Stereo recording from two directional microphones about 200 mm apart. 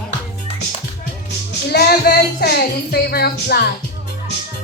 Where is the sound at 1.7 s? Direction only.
50° left (ahead or behind).